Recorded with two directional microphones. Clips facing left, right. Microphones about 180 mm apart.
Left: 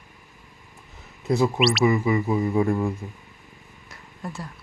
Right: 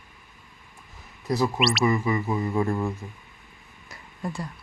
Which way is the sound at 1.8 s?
20° left (ahead or behind).